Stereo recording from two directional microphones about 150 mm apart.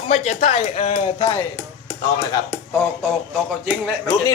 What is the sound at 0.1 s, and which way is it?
Speech, 55° left (ahead or behind).